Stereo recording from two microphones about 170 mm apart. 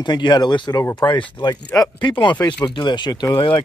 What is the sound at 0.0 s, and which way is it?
Speech, 25° left (ahead or behind).